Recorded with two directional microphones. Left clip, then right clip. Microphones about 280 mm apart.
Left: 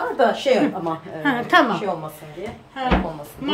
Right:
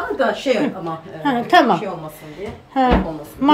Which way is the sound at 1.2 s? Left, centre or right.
Centre.